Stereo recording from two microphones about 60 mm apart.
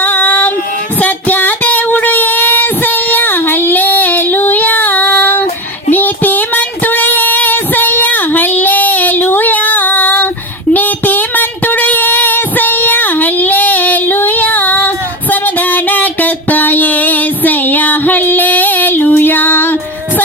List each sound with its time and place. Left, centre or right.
0.0 s female singing: left
0.9 s child singing: left